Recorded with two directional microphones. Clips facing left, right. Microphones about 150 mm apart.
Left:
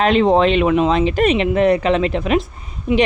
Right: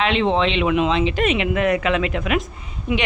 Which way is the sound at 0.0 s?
40° left (ahead or behind).